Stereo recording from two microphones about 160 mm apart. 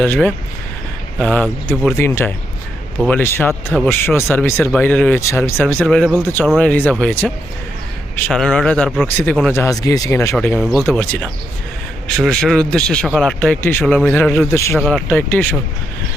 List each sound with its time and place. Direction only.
0.0 s speech: 10° left (ahead or behind)
5.5 s a man's voice: 5° left (ahead or behind)
9.6 s speech: 20° left (ahead or behind)
10.6 s a man's voice: centre (ahead or behind)
10.8 s a man's voice: 10° left (ahead or behind)
14.8 s speech: 5° left (ahead or behind)